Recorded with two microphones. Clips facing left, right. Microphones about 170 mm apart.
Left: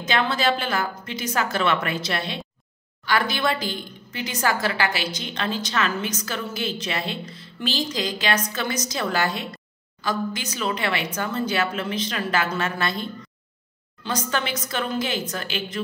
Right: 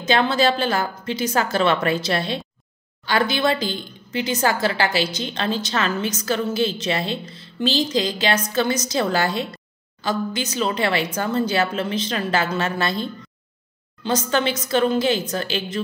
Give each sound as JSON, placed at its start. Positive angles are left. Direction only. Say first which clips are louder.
{"t": 0.0, "sound": "a woman's voice", "louder": "right 4 dB", "side_deg": -30}